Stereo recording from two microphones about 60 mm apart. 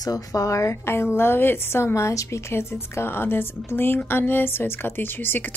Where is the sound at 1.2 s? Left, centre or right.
Left.